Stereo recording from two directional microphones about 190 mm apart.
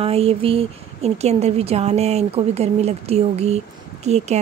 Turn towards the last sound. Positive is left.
turn(degrees=-35)  # may be behind; listen again after turning